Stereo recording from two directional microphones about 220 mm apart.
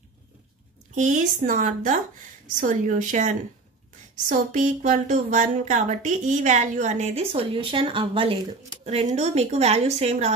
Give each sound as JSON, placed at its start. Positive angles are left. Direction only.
{"t": 0.9, "sound": "speech", "side_deg": -35}